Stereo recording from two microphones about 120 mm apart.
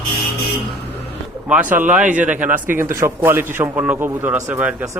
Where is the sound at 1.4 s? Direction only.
10° right (ahead or behind).